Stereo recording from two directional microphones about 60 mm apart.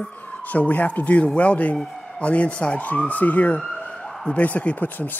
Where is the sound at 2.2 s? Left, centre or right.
Left.